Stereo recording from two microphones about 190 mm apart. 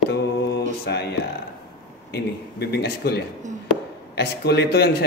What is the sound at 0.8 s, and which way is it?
A man's voice, 60° left (ahead or behind).